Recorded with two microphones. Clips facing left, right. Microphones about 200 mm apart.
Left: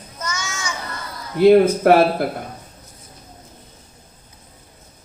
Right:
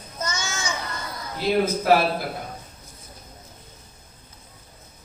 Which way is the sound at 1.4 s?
55° left (ahead or behind).